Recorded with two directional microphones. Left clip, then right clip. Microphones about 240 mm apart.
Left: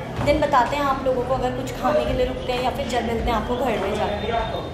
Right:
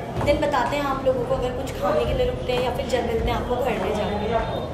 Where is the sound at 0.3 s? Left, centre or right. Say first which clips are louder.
Left 3 dB; centre.